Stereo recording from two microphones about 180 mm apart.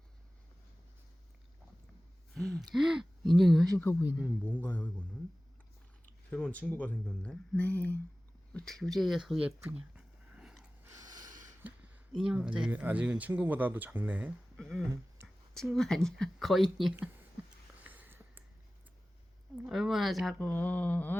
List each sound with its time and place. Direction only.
2.3 s speech: centre (ahead or behind)
3.8 s speech: 15° left (ahead or behind)
6.3 s speech: 5° left (ahead or behind)
10.8 s snort: 20° right (ahead or behind)
12.1 s speech: 5° right (ahead or behind)
14.6 s speech: centre (ahead or behind)
17.8 s a sound: 10° right (ahead or behind)
19.6 s speech: centre (ahead or behind)